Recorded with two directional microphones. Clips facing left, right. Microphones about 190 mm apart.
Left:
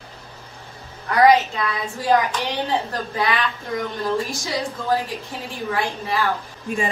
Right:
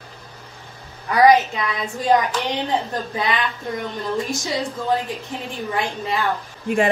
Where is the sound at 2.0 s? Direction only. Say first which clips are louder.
Right 1 dB; 20° right (ahead or behind).